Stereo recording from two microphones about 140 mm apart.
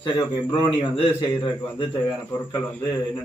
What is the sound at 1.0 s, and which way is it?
Speech, 40° left (ahead or behind).